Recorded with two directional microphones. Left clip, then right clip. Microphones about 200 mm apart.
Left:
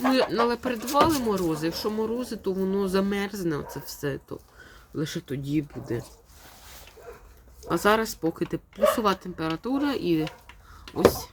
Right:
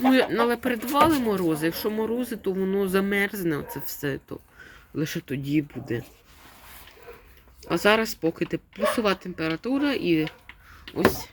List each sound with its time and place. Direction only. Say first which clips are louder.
0.1 s speech: right 1 dB; 15° right (ahead or behind)
7.6 s speech: right 1 dB; centre (ahead or behind)